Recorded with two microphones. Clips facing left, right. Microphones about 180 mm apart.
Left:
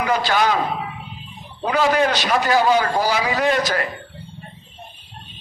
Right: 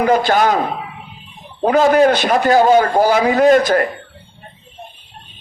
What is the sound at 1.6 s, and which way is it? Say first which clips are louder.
A man's voice: right 7 dB; 45° right (ahead or behind).